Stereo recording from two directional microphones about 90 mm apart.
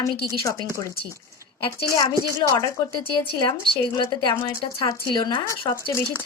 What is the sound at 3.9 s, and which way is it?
Speech, 45° left (ahead or behind).